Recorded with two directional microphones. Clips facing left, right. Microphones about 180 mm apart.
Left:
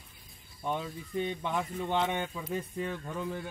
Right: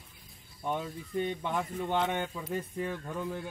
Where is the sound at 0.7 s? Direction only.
10° right (ahead or behind).